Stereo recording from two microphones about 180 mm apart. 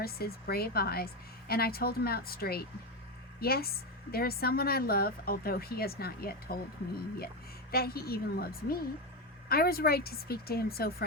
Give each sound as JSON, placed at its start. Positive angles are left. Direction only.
{"t": 0.0, "sound": "a woman's voice", "side_deg": 60}
{"t": 7.7, "sound": "a woman's voice", "side_deg": 60}